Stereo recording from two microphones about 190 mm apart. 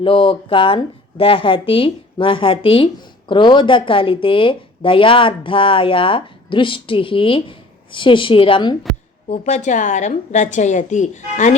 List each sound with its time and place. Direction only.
0.0 s speech: 25° left (ahead or behind)
9.3 s a woman's voice: 40° left (ahead or behind)